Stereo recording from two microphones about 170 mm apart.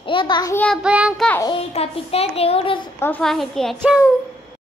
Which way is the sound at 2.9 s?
10° left (ahead or behind).